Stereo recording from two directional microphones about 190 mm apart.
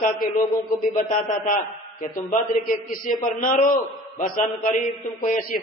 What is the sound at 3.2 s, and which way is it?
A man's voice, 45° left (ahead or behind).